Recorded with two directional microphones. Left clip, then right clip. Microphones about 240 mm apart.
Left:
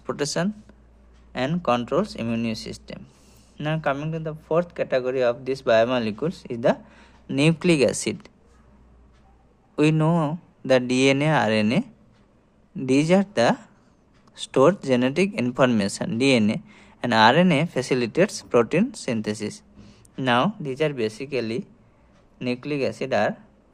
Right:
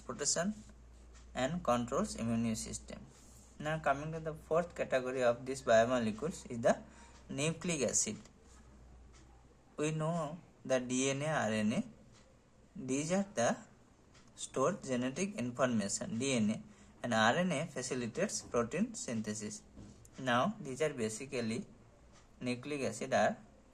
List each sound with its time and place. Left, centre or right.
0.2 s speech: left
9.7 s speech: left